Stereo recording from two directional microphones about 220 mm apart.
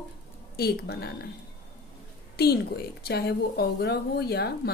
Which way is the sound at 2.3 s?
45° left (ahead or behind).